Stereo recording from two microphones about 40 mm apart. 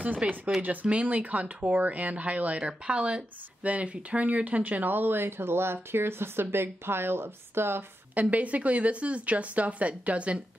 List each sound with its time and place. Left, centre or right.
0.2 s speech: right
6.4 s a woman's voice: right
8.1 s speech: right